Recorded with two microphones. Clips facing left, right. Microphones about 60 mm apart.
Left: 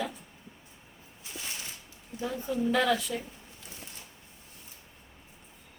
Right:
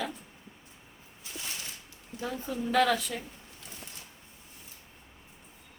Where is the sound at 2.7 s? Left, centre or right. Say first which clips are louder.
Right 2 dB; right.